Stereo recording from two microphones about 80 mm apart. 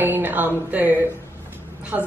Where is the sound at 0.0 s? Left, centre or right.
Right.